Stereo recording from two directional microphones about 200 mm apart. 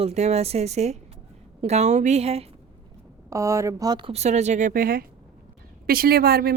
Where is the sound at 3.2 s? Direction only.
15° right (ahead or behind).